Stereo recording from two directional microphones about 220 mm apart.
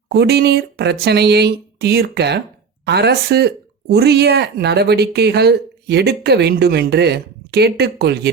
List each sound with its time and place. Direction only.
0.1 s speech: 50° right (ahead or behind)